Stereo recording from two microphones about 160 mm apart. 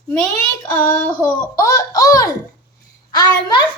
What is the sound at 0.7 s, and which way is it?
A woman's voice, 15° left (ahead or behind).